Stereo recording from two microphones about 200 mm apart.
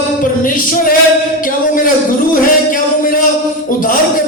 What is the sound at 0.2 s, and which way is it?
Music, 45° left (ahead or behind).